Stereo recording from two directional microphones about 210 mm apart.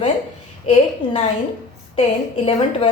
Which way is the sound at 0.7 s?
25° left (ahead or behind).